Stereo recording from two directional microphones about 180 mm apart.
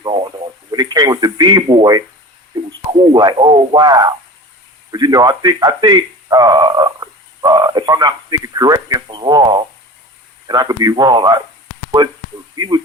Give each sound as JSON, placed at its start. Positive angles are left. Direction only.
{"t": 0.0, "sound": "speech", "side_deg": -25}